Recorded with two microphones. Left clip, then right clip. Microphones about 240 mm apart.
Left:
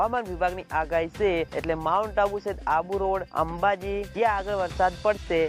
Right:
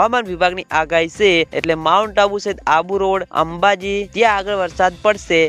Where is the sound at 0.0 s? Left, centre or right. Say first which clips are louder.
Right 10 dB; right.